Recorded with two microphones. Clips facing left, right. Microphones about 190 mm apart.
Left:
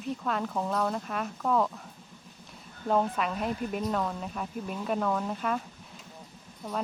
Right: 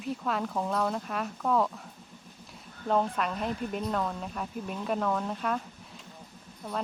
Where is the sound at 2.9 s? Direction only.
5° left (ahead or behind).